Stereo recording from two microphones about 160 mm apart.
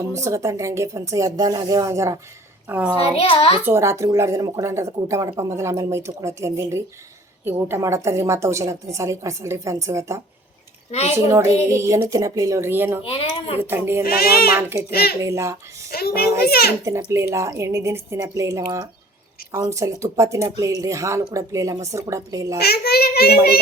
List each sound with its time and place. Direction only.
0.1 s a child's voice: 20° right (ahead or behind)
3.0 s a child's voice: 35° left (ahead or behind)
3.6 s speech: 15° right (ahead or behind)
11.3 s speech: 15° right (ahead or behind)
13.1 s a child's voice: 35° left (ahead or behind)
13.6 s speech: 15° right (ahead or behind)
14.0 s speech: 70° left (ahead or behind)
14.5 s speech: 15° right (ahead or behind)
15.9 s a child's voice: 75° left (ahead or behind)
16.8 s speech: 20° right (ahead or behind)
22.5 s a child's voice: 90° left